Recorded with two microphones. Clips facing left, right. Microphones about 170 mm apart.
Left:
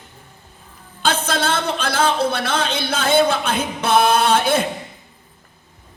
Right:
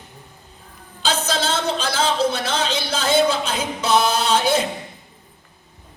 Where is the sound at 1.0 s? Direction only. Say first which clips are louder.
Left 2 dB; 55° left (ahead or behind).